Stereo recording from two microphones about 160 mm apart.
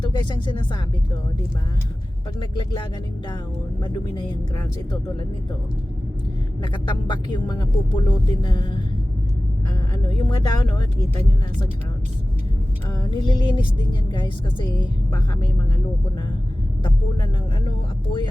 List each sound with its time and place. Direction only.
0.0 s speech: 30° left (ahead or behind)
2.4 s speech: 30° left (ahead or behind)
3.8 s speech: 30° left (ahead or behind)
6.6 s speech: 30° left (ahead or behind)
9.9 s speech: 25° left (ahead or behind)
12.9 s speech: 25° left (ahead or behind)
17.7 s speech: 30° left (ahead or behind)